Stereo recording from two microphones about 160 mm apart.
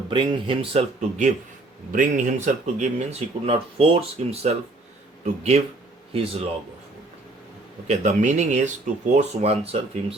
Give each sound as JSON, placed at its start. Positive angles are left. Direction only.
{"t": 0.1, "sound": "speech", "side_deg": -30}
{"t": 1.9, "sound": "speech", "side_deg": -55}
{"t": 7.9, "sound": "speech", "side_deg": -45}